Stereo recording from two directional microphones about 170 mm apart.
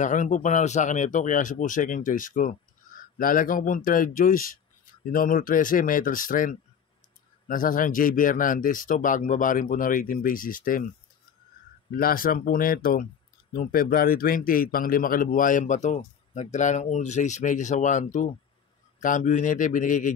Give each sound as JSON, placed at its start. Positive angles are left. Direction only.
{"t": 0.0, "sound": "a man's voice", "side_deg": 45}
{"t": 12.0, "sound": "a man's voice", "side_deg": 55}